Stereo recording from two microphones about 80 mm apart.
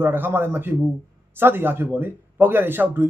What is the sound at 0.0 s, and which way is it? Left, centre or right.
Speech, right.